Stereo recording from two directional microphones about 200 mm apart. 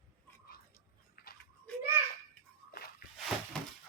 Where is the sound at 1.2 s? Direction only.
50° left (ahead or behind).